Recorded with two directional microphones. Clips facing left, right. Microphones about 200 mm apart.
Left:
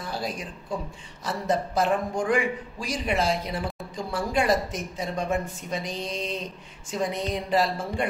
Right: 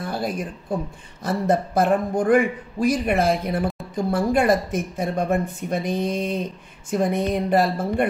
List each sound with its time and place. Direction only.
0.0 s a man's voice: 55° right (ahead or behind)